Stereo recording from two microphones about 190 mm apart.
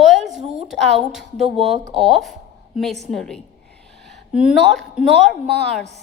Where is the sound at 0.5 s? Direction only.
Centre (ahead or behind).